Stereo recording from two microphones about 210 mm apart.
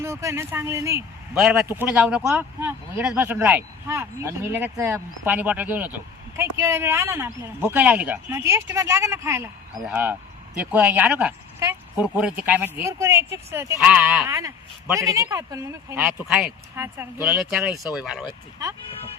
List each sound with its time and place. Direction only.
0.0 s speech: 15° right (ahead or behind)
1.4 s speech: centre (ahead or behind)
14.3 s speech: 15° right (ahead or behind)
16.0 s speech: 5° right (ahead or behind)